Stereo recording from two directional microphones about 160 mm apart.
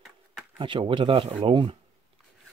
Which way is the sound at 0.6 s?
30° right (ahead or behind).